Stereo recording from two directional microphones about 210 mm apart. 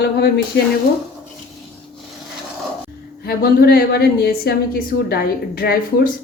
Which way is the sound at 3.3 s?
45° left (ahead or behind).